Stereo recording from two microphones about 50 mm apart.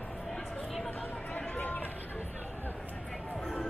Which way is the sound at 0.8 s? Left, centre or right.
Left.